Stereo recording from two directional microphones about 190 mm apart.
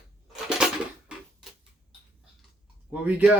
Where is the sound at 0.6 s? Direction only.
5° right (ahead or behind).